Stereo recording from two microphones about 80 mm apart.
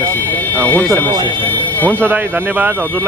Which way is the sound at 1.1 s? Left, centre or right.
Right.